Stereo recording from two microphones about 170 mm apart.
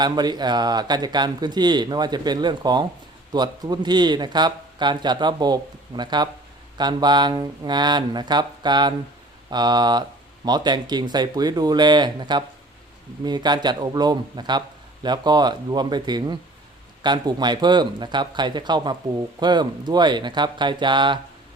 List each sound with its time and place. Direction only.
0.0 s speech: 25° right (ahead or behind)